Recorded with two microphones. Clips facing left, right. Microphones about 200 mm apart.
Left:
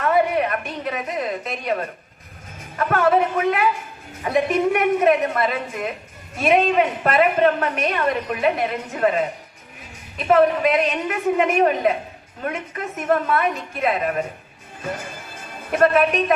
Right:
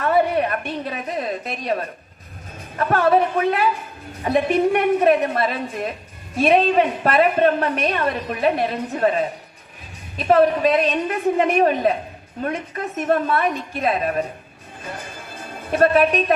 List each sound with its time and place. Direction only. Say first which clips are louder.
0.0 s a sound: right 1 dB; 30° right (ahead or behind)
2.7 s a woman's voice: right 1 dB; 30° right (ahead or behind)
15.7 s a woman's voice: right 1 dB; 30° right (ahead or behind)